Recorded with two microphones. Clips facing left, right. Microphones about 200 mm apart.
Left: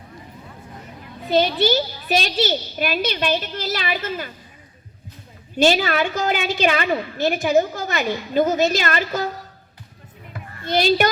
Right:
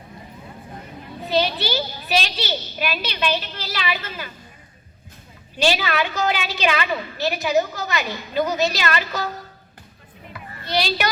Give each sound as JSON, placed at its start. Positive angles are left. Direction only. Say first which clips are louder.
{"t": 1.3, "sound": "a child's voice", "louder": "left 4 dB", "side_deg": 50}
{"t": 5.5, "sound": "a child's voice", "louder": "left 4 dB", "side_deg": 45}
{"t": 10.3, "sound": "a sound", "louder": "left 3 dB", "side_deg": 50}